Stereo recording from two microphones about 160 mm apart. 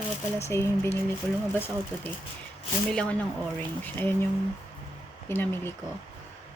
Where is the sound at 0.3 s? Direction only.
15° left (ahead or behind).